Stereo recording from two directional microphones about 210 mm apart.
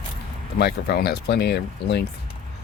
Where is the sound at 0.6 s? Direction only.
50° left (ahead or behind).